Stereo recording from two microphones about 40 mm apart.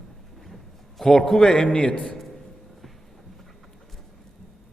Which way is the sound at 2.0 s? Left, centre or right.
Centre.